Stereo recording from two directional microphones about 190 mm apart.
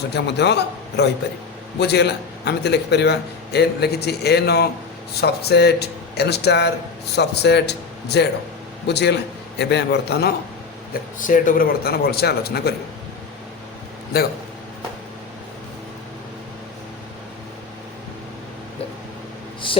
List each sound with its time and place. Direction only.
0.1 s a man's voice: 60° left (ahead or behind)
11.2 s a man's voice: 45° left (ahead or behind)
14.1 s a man's voice: 55° left (ahead or behind)